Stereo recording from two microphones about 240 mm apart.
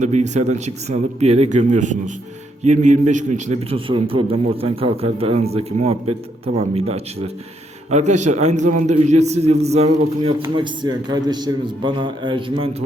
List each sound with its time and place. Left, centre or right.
0.0 s a man's voice: right
10.4 s a man's voice: centre